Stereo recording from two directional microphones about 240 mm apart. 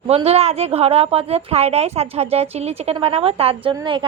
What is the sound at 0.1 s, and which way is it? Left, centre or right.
A woman's voice, right.